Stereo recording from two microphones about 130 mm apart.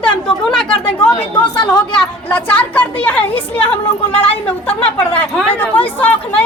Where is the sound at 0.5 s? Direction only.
5° left (ahead or behind).